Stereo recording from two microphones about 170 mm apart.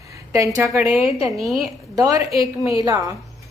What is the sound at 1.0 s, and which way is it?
Speech, 35° left (ahead or behind).